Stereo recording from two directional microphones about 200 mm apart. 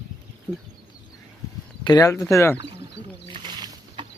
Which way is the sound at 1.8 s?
20° left (ahead or behind).